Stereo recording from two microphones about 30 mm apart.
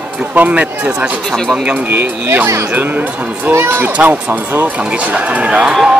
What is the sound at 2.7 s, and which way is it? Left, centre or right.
Speech, right.